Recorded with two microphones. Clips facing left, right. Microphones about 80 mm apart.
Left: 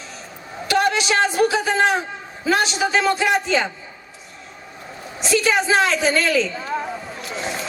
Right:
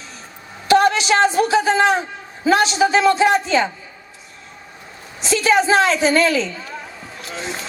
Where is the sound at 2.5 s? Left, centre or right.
Right.